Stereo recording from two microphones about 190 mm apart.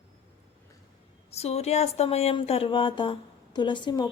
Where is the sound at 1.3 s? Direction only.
35° left (ahead or behind).